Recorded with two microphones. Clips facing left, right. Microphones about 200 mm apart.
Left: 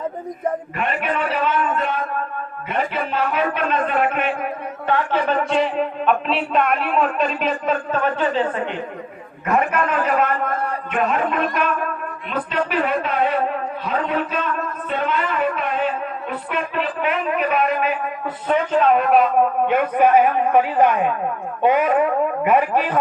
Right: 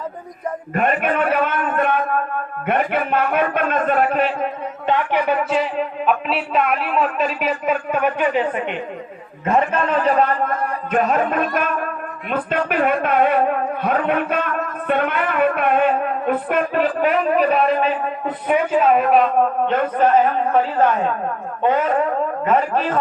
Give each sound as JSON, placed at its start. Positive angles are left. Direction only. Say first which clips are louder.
{"t": 0.7, "sound": "a man's voice", "louder": "right 4 dB", "side_deg": -45}
{"t": 4.9, "sound": "a man's voice", "louder": "right 1 dB", "side_deg": -15}
{"t": 9.5, "sound": "a man's voice", "louder": "right 2 dB", "side_deg": -30}
{"t": 10.9, "sound": "a man's voice", "louder": "right 3 dB", "side_deg": -40}
{"t": 12.3, "sound": "a sound", "louder": "right 2 dB", "side_deg": -50}
{"t": 18.4, "sound": "a man's voice", "louder": "right 1 dB", "side_deg": -10}